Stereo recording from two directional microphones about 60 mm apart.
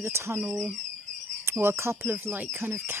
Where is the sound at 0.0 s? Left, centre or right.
Right.